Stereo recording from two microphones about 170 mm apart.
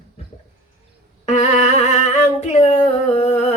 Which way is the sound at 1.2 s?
45° left (ahead or behind).